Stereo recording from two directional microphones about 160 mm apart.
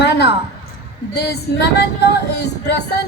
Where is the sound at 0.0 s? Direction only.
90° left.